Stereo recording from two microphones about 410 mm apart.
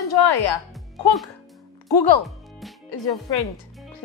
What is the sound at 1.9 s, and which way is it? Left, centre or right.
Speech, left.